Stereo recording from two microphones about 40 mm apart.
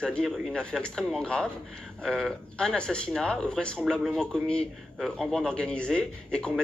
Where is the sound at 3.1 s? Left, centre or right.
Centre.